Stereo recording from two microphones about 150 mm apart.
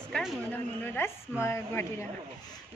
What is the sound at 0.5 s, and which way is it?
A man's voice, 15° left (ahead or behind).